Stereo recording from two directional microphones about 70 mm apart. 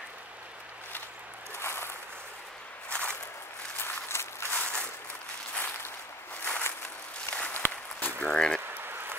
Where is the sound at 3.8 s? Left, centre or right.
Left.